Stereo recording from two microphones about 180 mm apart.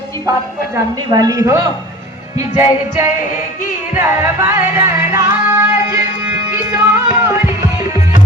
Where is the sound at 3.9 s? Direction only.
10° right (ahead or behind).